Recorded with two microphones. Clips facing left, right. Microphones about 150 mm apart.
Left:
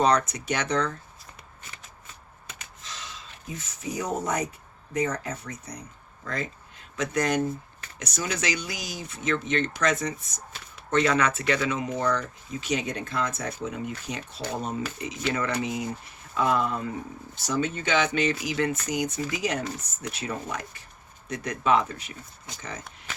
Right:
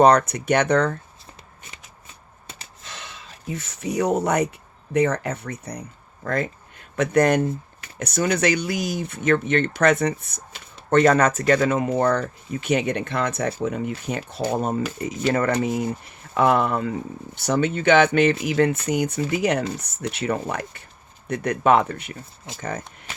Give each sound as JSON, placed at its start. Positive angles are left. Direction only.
{"t": 0.0, "sound": "speech", "side_deg": -60}
{"t": 2.5, "sound": "gasp", "side_deg": -30}
{"t": 2.8, "sound": "a sound", "side_deg": -60}
{"t": 4.9, "sound": "speech", "side_deg": -70}
{"t": 16.3, "sound": "speech", "side_deg": -65}